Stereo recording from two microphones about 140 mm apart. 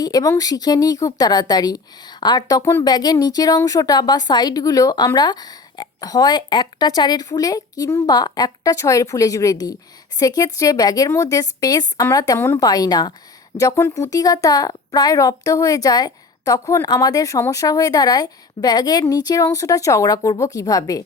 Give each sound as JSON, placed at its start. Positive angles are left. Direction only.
{"t": 0.0, "sound": "a woman's voice", "side_deg": 25}